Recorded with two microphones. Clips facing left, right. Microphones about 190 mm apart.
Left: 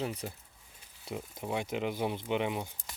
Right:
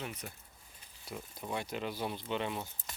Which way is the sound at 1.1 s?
20° left (ahead or behind).